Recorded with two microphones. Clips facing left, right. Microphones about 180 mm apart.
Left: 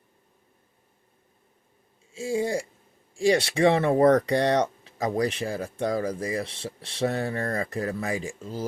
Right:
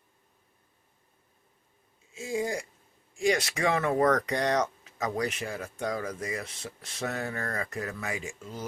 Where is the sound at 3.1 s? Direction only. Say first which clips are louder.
Left 5 dB; 30° left (ahead or behind).